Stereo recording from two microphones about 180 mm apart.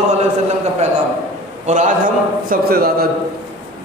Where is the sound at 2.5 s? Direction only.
55° right (ahead or behind).